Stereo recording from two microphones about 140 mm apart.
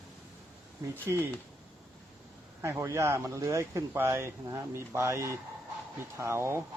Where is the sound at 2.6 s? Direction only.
20° right (ahead or behind).